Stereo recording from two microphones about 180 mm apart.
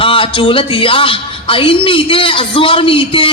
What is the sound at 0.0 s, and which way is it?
Speech, 30° left (ahead or behind).